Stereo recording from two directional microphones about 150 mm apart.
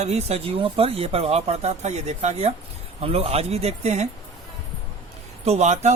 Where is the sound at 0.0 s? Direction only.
45° right (ahead or behind).